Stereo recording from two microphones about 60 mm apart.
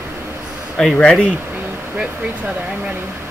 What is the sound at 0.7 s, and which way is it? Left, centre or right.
Speech, centre.